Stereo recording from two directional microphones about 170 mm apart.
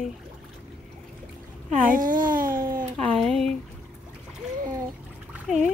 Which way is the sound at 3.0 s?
Centre (ahead or behind).